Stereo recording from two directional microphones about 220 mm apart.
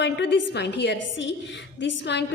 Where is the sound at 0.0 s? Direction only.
55° left (ahead or behind).